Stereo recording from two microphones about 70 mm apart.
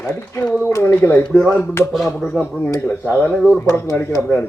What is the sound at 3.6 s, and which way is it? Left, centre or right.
Speech, left.